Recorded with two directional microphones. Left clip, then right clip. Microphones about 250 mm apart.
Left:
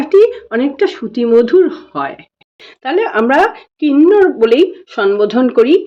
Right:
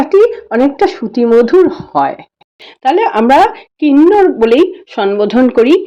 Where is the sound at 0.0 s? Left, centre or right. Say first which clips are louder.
Right 1 dB; centre.